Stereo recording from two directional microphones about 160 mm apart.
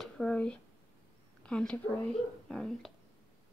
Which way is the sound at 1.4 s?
5° left (ahead or behind).